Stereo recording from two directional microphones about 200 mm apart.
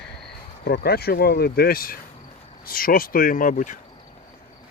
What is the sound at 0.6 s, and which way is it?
A man's voice, 50° left (ahead or behind).